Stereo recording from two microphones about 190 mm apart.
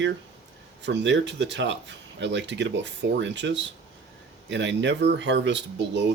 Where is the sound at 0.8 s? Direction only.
65° right (ahead or behind).